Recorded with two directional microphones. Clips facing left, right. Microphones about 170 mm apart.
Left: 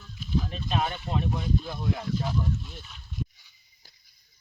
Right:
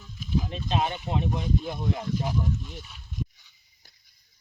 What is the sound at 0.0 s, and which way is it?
Speech, 15° right (ahead or behind).